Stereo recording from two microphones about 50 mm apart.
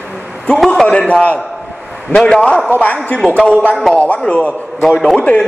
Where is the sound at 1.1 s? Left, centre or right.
Left.